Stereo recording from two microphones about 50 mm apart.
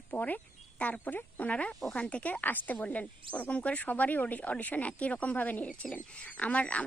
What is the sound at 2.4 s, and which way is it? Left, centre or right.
Speech, left.